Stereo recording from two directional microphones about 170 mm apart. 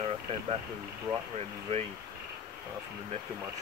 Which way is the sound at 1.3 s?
40° right (ahead or behind).